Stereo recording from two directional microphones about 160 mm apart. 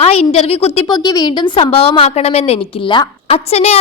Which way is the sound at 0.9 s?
25° left (ahead or behind).